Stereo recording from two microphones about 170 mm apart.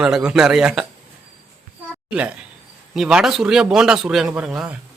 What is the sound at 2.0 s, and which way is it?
A man's voice, 5° right (ahead or behind).